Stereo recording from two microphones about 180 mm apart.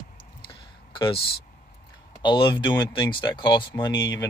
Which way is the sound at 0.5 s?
25° left (ahead or behind).